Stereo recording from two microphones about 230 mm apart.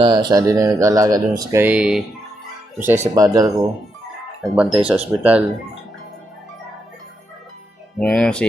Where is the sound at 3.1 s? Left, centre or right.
Centre.